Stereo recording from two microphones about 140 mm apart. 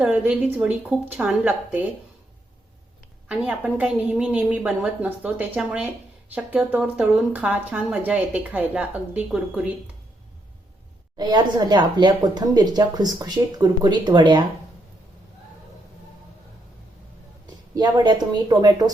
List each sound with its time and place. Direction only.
0.0 s a woman's voice: 10° right (ahead or behind)
3.2 s a woman's voice: 10° right (ahead or behind)
11.2 s speech: 30° right (ahead or behind)
17.7 s speech: 30° right (ahead or behind)